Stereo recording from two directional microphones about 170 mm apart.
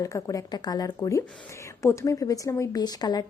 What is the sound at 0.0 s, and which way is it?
A woman's voice, 20° left (ahead or behind).